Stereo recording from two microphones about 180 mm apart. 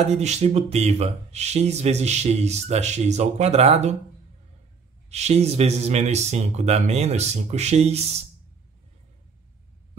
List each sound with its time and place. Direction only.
0.0 s speech: 35° right (ahead or behind)
5.1 s speech: 35° right (ahead or behind)